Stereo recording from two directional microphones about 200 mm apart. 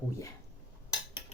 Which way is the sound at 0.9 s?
20° left (ahead or behind).